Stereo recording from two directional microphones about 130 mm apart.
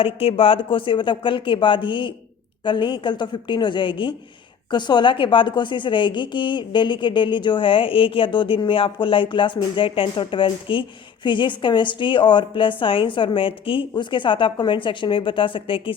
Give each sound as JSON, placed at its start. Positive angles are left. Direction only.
{"t": 0.0, "sound": "a woman's voice", "side_deg": 45}